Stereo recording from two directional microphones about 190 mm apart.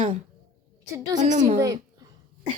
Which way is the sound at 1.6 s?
20° right (ahead or behind).